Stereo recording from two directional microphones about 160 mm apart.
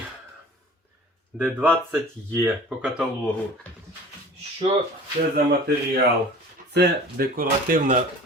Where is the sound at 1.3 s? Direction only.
10° right (ahead or behind).